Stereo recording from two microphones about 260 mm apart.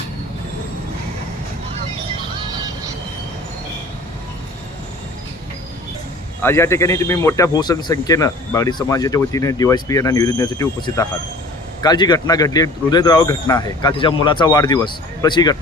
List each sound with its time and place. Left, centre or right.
6.4 s a man's voice: centre